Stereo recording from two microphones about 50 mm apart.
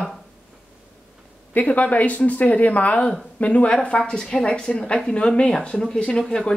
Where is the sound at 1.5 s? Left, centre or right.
Left.